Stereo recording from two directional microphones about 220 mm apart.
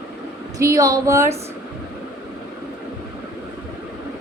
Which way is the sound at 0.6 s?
15° right (ahead or behind).